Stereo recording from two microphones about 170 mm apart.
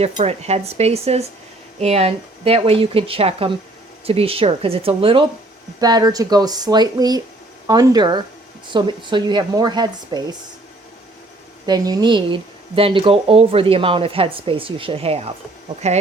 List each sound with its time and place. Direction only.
0.0 s speech: 40° right (ahead or behind)
11.6 s speech: 25° right (ahead or behind); by 16.0 s 40° right (ahead or behind)